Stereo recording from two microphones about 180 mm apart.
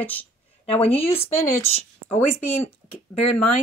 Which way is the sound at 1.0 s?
30° left (ahead or behind).